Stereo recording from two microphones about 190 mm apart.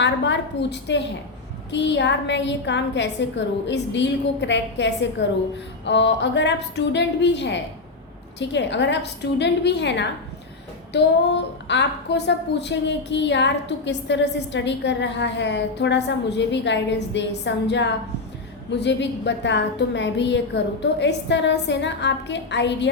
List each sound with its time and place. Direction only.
0.0 s a woman's voice: 70° left (ahead or behind)